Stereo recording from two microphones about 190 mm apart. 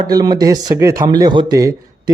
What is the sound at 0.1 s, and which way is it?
A man's voice, 20° right (ahead or behind).